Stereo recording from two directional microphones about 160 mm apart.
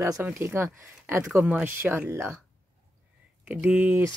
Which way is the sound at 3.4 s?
5° right (ahead or behind).